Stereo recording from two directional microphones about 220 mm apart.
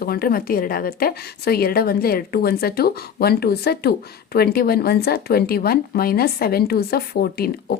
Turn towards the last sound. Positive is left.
turn(degrees=45)  # may be behind; listen again after turning